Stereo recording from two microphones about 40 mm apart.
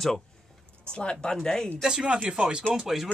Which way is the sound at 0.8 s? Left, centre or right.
Left.